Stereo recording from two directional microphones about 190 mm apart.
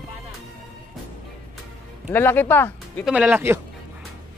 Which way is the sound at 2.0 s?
10° left (ahead or behind).